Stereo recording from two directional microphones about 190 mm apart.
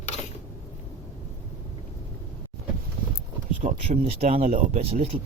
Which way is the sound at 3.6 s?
45° right (ahead or behind).